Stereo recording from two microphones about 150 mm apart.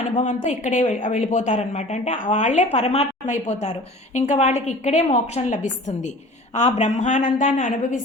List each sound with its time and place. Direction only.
0.4 s a woman's voice: 50° left (ahead or behind)